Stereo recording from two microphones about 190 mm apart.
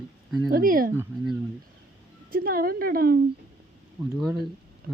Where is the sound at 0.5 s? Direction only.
50° right (ahead or behind).